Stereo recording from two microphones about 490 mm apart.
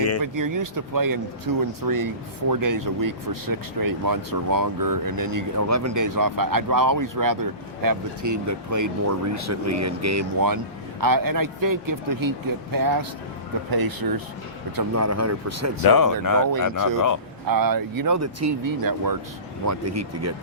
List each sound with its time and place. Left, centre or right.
0.2 s speech: right
14.8 s speech: right
15.8 s speech: left
17.4 s speech: right